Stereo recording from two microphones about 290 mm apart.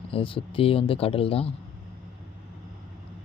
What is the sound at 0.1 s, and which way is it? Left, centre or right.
Speech, centre.